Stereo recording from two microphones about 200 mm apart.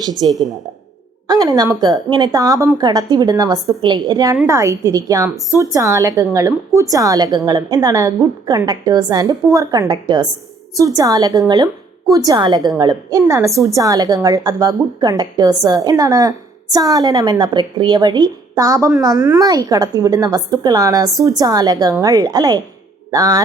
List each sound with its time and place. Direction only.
0.0 s a woman's voice: 20° right (ahead or behind)
0.3 s a woman's voice: centre (ahead or behind)
1.3 s a woman's voice: 20° right (ahead or behind)